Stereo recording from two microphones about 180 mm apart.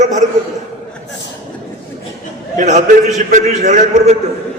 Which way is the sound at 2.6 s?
40° right (ahead or behind).